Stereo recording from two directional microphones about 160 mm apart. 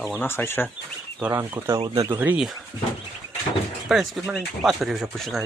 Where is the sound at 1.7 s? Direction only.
25° right (ahead or behind).